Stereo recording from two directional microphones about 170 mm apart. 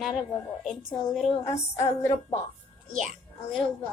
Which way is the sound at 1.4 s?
40° left (ahead or behind).